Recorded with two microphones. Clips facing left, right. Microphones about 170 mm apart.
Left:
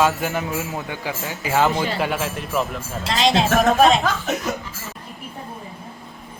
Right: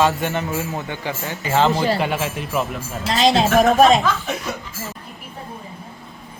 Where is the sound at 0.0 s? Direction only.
5° left (ahead or behind).